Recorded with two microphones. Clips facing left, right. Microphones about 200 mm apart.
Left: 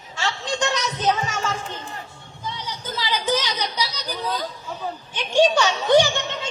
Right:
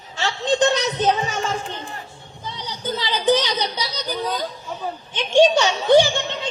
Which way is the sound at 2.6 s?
30° right (ahead or behind).